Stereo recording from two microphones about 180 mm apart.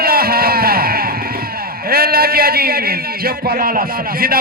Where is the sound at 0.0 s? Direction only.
55° right (ahead or behind).